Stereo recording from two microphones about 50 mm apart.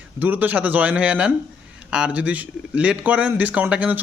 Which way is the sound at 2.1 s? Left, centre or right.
Right.